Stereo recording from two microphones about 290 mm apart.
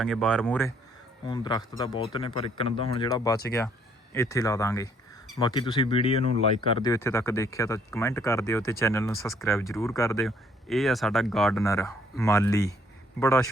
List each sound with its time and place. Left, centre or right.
0.0 s speech: centre
10.2 s speech: centre
11.6 s speech: centre